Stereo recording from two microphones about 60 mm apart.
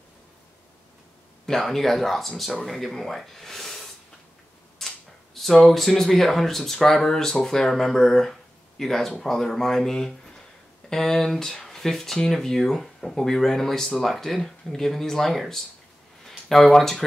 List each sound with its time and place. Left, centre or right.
1.4 s speech: centre